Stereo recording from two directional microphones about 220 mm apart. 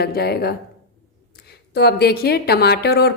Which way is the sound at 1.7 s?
45° left (ahead or behind).